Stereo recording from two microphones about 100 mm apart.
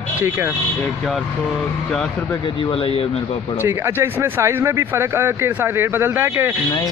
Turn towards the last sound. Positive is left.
turn(degrees=-25)  # may be behind; listen again after turning